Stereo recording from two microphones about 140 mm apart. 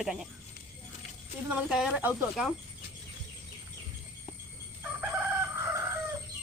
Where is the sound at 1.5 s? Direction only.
5° right (ahead or behind).